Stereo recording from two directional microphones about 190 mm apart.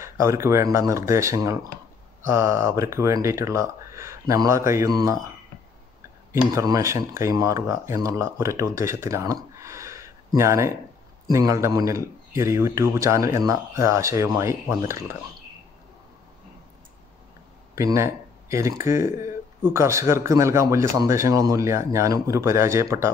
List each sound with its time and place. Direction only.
0.0 s speech: 15° right (ahead or behind)
6.5 s speech: 20° right (ahead or behind)
17.7 s speech: 15° right (ahead or behind)